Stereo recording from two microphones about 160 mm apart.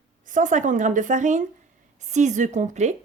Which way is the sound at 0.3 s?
55° right (ahead or behind).